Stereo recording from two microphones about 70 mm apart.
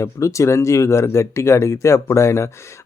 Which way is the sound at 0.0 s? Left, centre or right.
Left.